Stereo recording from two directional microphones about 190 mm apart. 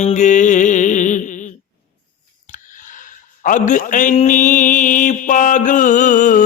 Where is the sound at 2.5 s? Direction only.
40° left (ahead or behind).